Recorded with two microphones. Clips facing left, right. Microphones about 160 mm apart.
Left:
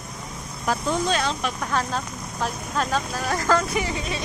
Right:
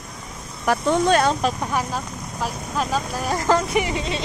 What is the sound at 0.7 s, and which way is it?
Speech, 60° right (ahead or behind).